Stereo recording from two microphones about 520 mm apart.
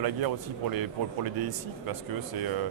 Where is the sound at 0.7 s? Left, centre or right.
Right.